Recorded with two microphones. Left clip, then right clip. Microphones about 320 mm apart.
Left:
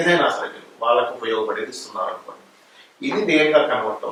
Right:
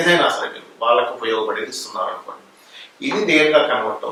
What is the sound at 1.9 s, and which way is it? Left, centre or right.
Speech, centre.